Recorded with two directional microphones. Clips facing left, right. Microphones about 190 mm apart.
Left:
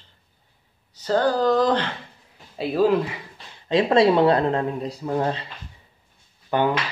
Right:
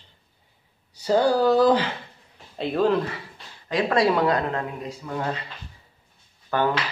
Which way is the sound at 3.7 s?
25° left (ahead or behind).